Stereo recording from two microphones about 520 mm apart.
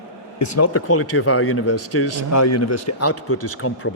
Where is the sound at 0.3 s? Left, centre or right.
Left.